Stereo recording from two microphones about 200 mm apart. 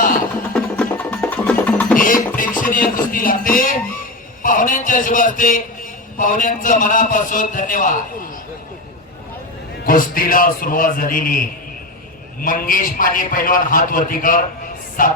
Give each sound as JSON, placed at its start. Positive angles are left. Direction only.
{"t": 0.5, "sound": "music", "side_deg": 5}
{"t": 2.0, "sound": "a sound", "side_deg": 45}
{"t": 4.4, "sound": "a man's voice", "side_deg": 40}
{"t": 9.8, "sound": "a man's voice", "side_deg": 45}